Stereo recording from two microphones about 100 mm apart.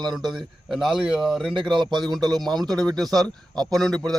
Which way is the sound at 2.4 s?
5° left (ahead or behind).